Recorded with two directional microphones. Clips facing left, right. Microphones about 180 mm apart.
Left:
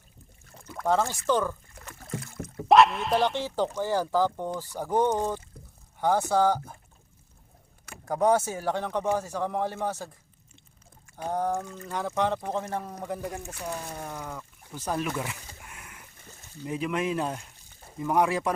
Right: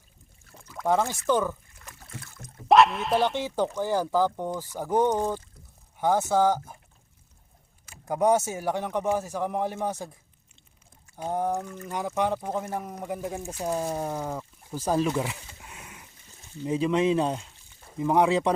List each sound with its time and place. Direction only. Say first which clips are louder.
0.8 s a man's voice: right 1 dB; 10° right (ahead or behind)
2.6 s speech: even; centre (ahead or behind)
3.3 s a man's voice: right 1 dB; 15° right (ahead or behind)
8.0 s a man's voice: right 1 dB; 15° right (ahead or behind)
11.2 s a man's voice: right 1 dB; 15° right (ahead or behind)
14.0 s speech: right 6 dB; 30° right (ahead or behind)
15.6 s a sound: right 2 dB; 20° right (ahead or behind)
16.6 s speech: right 5 dB; 25° right (ahead or behind)